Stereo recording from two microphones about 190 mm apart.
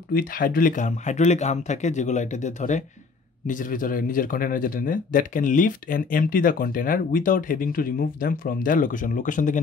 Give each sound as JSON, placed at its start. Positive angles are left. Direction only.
{"t": 0.1, "sound": "a man's voice", "side_deg": 50}